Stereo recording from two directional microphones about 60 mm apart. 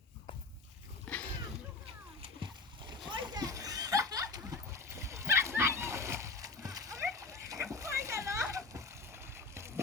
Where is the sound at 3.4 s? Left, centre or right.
Right.